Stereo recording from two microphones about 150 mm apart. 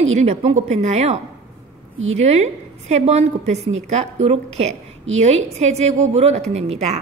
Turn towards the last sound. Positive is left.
turn(degrees=-45)  # may be behind; listen again after turning